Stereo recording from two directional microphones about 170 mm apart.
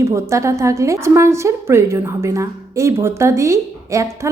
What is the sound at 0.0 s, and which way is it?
A woman's voice, 15° right (ahead or behind).